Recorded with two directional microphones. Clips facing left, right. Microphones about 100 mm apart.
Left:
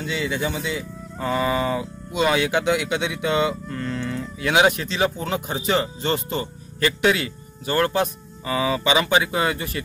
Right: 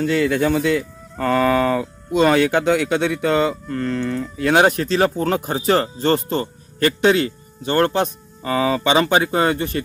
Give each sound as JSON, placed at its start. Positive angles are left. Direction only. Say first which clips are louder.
{"t": 0.0, "sound": "speech", "louder": "right 8 dB", "side_deg": -55}
{"t": 2.1, "sound": "speech", "louder": "right 5 dB", "side_deg": -45}